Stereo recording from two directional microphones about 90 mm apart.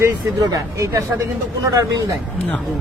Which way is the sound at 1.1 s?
25° right (ahead or behind).